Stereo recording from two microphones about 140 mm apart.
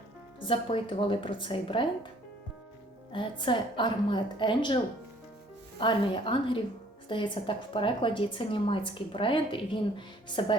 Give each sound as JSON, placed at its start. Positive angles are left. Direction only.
{"t": 0.3, "sound": "a woman's voice", "side_deg": 40}
{"t": 3.1, "sound": "a woman's voice", "side_deg": 35}
{"t": 5.8, "sound": "a woman's voice", "side_deg": 35}